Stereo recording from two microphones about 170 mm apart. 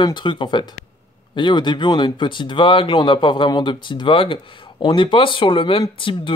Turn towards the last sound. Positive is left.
turn(degrees=30)  # may be behind; listen again after turning